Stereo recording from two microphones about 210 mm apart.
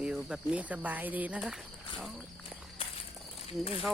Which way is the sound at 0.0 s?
5° right (ahead or behind).